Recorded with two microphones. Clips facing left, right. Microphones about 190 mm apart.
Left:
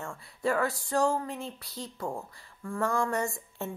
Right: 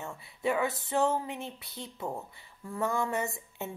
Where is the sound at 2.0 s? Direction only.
5° right (ahead or behind).